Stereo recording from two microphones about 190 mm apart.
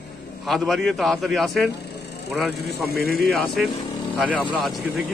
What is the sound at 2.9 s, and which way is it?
Speech, 50° left (ahead or behind).